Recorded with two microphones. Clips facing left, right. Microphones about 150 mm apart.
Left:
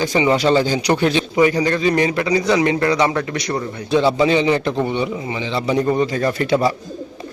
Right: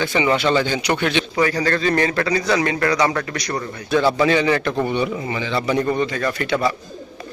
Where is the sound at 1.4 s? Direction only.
20° left (ahead or behind).